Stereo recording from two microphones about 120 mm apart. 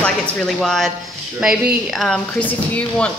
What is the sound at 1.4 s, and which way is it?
Speech, 5° right (ahead or behind).